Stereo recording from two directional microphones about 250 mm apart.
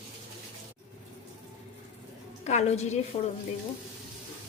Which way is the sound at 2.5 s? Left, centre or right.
Left.